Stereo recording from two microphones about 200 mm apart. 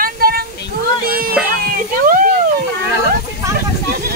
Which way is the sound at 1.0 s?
45° right (ahead or behind).